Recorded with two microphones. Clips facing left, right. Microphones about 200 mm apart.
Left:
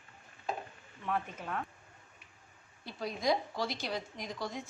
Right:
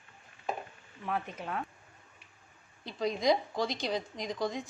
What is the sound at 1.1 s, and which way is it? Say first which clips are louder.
Speech: right 1 dB; 10° right (ahead or behind).